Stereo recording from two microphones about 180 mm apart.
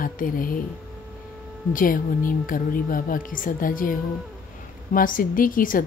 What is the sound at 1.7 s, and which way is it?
A woman's voice, 50° left (ahead or behind).